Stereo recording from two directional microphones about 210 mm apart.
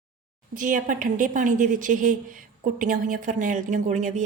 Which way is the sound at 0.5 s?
40° right (ahead or behind).